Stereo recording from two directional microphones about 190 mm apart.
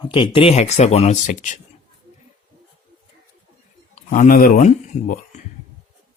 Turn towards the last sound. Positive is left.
turn(degrees=40)  # may be behind; listen again after turning